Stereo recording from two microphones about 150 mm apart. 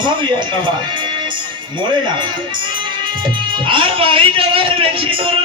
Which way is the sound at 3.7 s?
35° right (ahead or behind).